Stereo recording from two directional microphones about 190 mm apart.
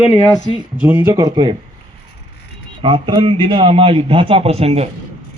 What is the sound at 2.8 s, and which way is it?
A man's voice, 25° right (ahead or behind).